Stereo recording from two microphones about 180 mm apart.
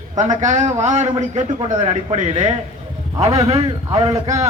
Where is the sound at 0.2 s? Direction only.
40° right (ahead or behind).